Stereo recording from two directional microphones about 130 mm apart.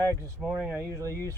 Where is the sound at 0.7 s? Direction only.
20° right (ahead or behind).